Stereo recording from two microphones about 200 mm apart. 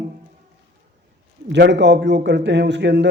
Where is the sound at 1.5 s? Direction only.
55° right (ahead or behind).